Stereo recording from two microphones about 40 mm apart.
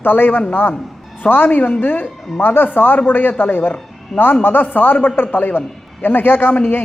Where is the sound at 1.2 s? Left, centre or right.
Left.